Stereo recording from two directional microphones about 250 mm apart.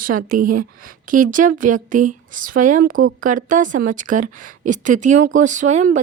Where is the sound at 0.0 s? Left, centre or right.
Right.